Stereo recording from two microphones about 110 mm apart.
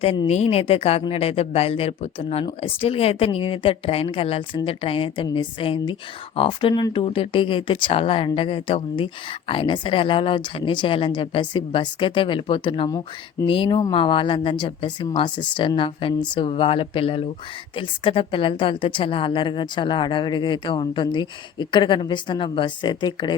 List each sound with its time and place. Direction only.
0.3 s a woman's voice: 80° left; by 16.5 s 45° left (ahead or behind)
16.5 s a woman's voice: 60° left (ahead or behind)